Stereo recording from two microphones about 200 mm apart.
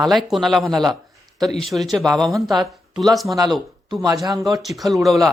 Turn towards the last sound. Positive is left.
turn(degrees=0)  # may be behind; listen again after turning